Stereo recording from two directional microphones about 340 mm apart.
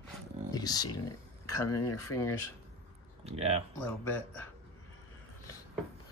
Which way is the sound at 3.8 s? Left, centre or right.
Centre.